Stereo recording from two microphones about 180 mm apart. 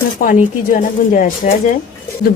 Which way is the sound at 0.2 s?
45° left (ahead or behind).